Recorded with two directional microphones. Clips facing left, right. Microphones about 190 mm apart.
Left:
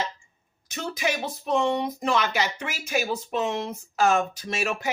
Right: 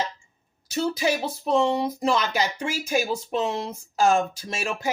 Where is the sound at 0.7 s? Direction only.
30° right (ahead or behind).